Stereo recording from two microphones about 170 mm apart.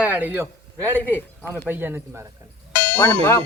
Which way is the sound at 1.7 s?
10° right (ahead or behind).